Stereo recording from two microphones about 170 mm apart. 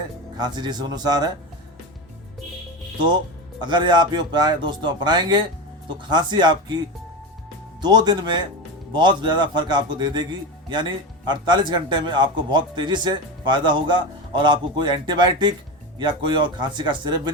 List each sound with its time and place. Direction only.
0.3 s speech: 25° right (ahead or behind)
3.6 s speech: 25° right (ahead or behind)
7.8 s speech: 25° right (ahead or behind)